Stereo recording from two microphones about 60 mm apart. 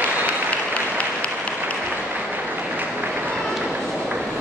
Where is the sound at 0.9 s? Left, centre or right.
Left.